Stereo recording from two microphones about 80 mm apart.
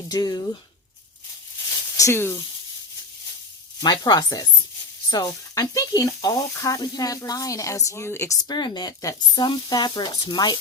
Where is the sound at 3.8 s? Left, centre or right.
Left.